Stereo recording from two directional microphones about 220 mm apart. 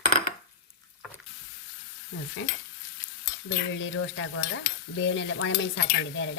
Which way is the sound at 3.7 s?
55° left (ahead or behind).